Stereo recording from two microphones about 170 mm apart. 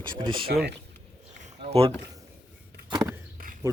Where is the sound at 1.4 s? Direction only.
35° right (ahead or behind).